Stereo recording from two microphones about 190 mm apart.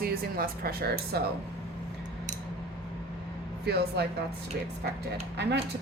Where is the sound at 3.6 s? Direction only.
60° right (ahead or behind).